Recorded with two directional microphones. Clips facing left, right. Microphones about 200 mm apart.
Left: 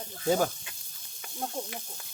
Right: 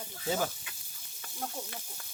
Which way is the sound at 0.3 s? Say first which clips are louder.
Left 6 dB; 45° left (ahead or behind).